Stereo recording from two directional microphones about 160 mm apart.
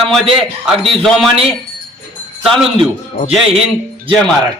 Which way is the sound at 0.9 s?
Centre (ahead or behind).